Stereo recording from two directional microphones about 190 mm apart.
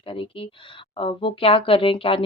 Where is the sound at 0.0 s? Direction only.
25° left (ahead or behind).